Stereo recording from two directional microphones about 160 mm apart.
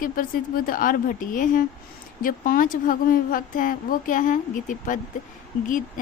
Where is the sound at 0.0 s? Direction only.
60° left (ahead or behind).